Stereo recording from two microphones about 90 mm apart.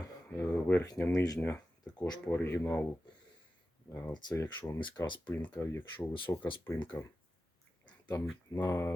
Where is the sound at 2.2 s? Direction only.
25° left (ahead or behind).